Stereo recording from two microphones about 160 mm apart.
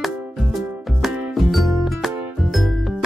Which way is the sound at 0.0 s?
Centre (ahead or behind).